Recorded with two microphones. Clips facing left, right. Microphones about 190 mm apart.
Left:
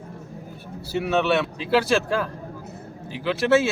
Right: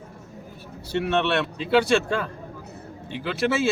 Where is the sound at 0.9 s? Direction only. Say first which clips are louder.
Left 1 dB; 5° left (ahead or behind).